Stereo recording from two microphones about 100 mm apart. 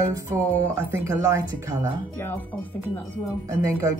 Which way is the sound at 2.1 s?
20° left (ahead or behind).